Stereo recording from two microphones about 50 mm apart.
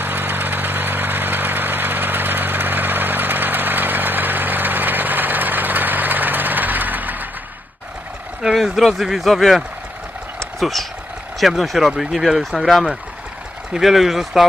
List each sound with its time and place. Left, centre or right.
0.0 s vehicle: right
8.5 s speech: centre
10.4 s a sound: centre
11.3 s speech: centre